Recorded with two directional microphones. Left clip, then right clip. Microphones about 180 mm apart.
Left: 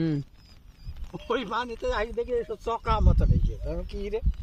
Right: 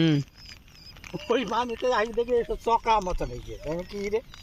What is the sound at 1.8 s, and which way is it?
Speech, 15° right (ahead or behind).